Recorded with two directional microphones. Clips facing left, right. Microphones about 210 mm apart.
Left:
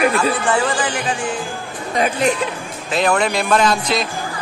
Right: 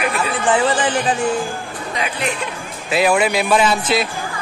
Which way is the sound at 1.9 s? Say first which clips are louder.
Left 6 dB; 45° left (ahead or behind).